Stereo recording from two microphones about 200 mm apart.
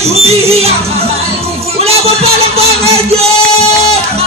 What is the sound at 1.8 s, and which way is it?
Music, 30° right (ahead or behind).